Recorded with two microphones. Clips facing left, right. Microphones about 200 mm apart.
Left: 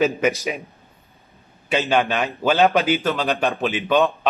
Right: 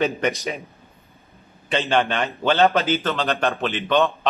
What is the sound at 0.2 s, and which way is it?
Speech, 5° left (ahead or behind).